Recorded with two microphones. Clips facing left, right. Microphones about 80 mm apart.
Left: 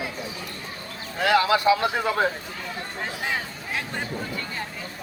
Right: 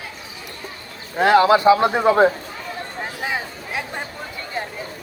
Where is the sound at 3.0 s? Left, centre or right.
Centre.